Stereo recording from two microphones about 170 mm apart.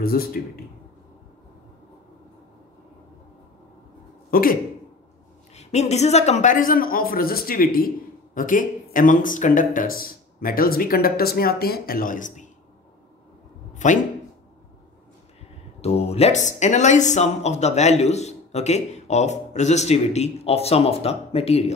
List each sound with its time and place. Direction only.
0.0 s speech: 60° left (ahead or behind)
4.3 s a sound: 60° left (ahead or behind)
5.5 s a woman's voice: 40° left (ahead or behind)
13.8 s a woman's voice: 45° left (ahead or behind)
15.8 s speech: 35° left (ahead or behind)